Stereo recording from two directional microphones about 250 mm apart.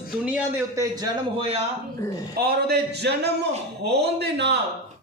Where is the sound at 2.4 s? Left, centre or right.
Right.